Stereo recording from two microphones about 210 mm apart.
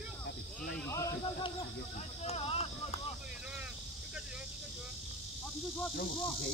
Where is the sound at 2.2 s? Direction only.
30° left (ahead or behind).